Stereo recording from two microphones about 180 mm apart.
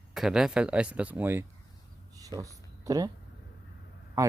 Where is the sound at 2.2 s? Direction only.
20° right (ahead or behind).